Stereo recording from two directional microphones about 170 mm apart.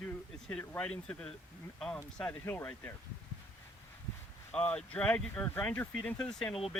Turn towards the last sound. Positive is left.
turn(degrees=0)  # may be behind; listen again after turning